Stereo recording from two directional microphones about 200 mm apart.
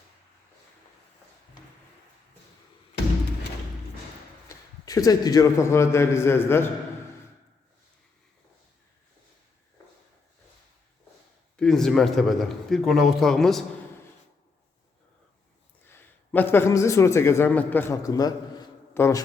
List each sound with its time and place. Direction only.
4.4 s a man's voice: 20° left (ahead or behind)
11.5 s a man's voice: centre (ahead or behind)
15.9 s a man's voice: 10° left (ahead or behind)